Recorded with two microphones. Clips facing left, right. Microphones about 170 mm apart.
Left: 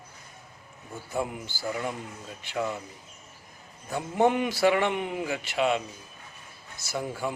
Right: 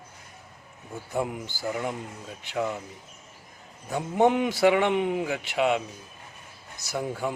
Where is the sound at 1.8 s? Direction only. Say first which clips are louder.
Right 2 dB; 5° right (ahead or behind).